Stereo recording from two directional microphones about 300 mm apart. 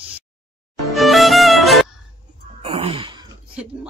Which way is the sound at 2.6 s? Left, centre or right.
Centre.